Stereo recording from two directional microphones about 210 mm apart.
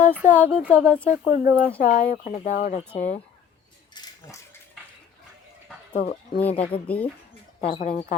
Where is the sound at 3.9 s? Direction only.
20° left (ahead or behind).